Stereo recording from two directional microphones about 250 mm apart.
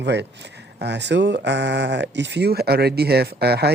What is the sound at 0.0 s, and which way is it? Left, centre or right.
Speech, right.